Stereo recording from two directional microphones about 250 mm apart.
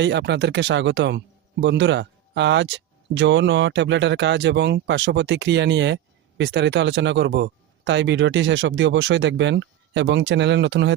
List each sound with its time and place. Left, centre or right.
0.0 s speech: right